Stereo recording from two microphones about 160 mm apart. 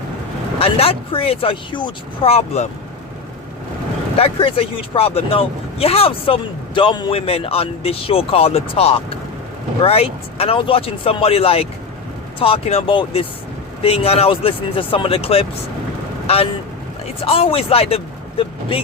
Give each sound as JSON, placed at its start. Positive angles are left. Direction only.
{"t": 0.6, "sound": "speech", "side_deg": 35}
{"t": 4.2, "sound": "speech", "side_deg": 35}